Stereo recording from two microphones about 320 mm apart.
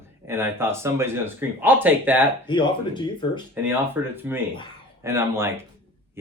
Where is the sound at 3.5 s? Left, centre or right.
Centre.